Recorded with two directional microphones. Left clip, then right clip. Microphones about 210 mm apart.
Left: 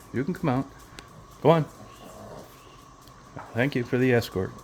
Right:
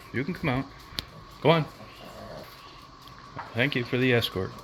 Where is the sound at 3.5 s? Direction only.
25° left (ahead or behind).